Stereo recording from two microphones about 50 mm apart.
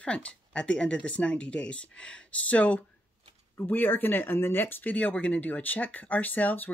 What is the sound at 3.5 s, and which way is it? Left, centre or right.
Speech, left.